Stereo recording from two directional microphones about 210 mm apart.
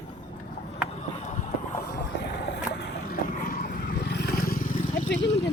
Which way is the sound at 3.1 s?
45° left (ahead or behind).